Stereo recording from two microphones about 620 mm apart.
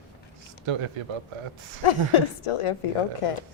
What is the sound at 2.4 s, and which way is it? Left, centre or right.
Speech, left.